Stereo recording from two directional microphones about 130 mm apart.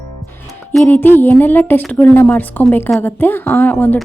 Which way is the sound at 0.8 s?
15° left (ahead or behind).